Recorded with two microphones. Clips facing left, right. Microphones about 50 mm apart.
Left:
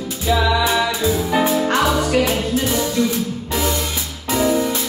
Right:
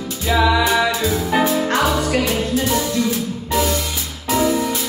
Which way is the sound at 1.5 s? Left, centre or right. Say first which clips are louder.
Left 1 dB; centre.